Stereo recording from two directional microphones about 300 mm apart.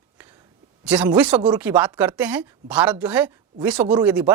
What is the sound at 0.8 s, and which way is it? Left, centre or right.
A woman's voice, centre.